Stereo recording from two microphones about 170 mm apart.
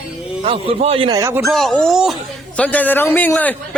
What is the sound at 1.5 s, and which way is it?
Speech, centre (ahead or behind).